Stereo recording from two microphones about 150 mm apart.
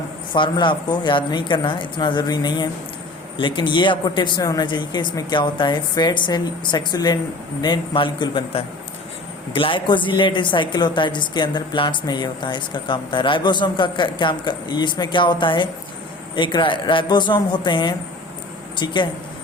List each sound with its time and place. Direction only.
0.3 s a woman's voice: 30° left (ahead or behind)